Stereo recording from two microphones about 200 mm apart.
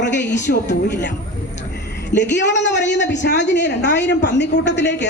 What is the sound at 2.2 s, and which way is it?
A woman's voice, 60° left (ahead or behind).